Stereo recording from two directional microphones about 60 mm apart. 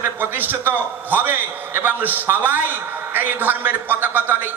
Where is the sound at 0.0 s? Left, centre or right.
Right.